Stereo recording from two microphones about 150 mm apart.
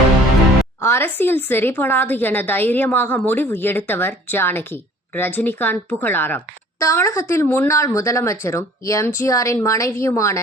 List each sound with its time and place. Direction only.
0.8 s a woman's voice: 15° left (ahead or behind)